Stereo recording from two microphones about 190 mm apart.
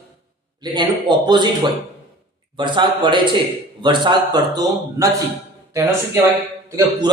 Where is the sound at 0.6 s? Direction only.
20° right (ahead or behind).